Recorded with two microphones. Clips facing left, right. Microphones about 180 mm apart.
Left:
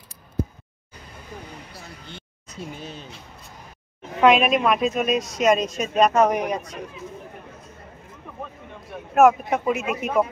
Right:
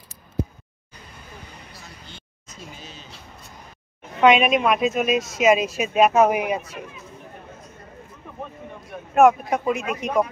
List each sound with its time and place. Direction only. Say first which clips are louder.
2.0 s a sound: left 3 dB; 60° left (ahead or behind)
4.2 s speech: even; centre (ahead or behind)
8.8 s speech: even; centre (ahead or behind)